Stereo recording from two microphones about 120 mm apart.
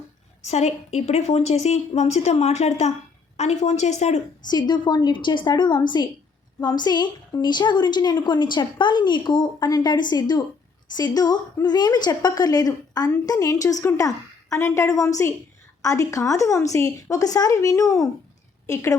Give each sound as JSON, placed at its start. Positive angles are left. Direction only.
{"t": 0.4, "sound": "a woman's voice", "side_deg": 65}
{"t": 4.4, "sound": "a woman's voice", "side_deg": 35}